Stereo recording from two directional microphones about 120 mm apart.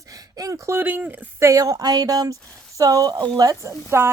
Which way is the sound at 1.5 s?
30° right (ahead or behind).